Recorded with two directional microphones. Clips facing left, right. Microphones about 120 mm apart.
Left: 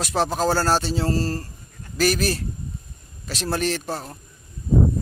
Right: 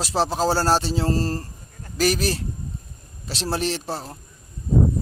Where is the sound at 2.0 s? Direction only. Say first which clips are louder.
Even; 30° right (ahead or behind).